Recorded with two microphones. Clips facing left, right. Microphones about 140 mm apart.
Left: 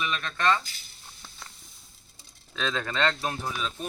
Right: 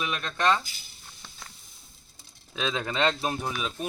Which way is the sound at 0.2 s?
20° right (ahead or behind).